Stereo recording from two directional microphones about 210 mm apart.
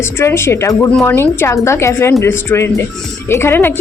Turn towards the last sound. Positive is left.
turn(degrees=10)  # may be behind; listen again after turning